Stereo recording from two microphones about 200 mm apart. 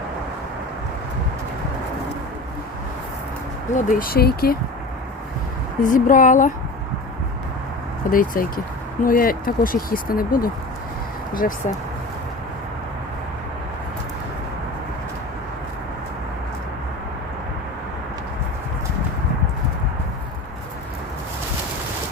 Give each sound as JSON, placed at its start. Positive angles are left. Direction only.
{"t": 3.7, "sound": "speech", "side_deg": 40}
{"t": 5.8, "sound": "speech", "side_deg": 40}
{"t": 8.1, "sound": "speech", "side_deg": 45}